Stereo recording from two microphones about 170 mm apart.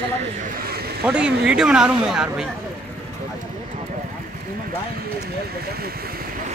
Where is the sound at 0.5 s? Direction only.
65° right (ahead or behind).